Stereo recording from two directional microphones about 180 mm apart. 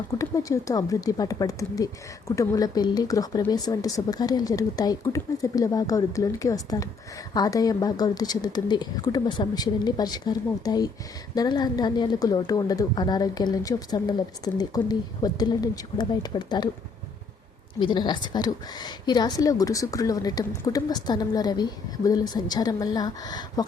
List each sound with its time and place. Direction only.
0.2 s speech: 20° left (ahead or behind)
17.7 s speech: 25° left (ahead or behind)